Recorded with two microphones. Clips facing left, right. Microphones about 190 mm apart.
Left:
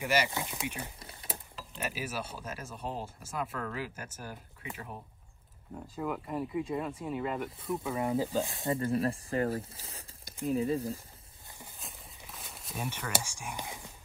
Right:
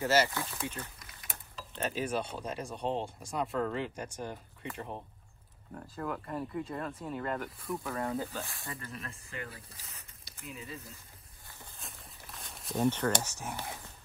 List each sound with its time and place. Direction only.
0.0 s speech: 15° left (ahead or behind)
0.9 s typing: 30° left (ahead or behind)
1.8 s speech: 10° left (ahead or behind)
8.0 s speech: 15° left (ahead or behind); by 11.0 s 35° left (ahead or behind)
11.8 s a sound: centre (ahead or behind)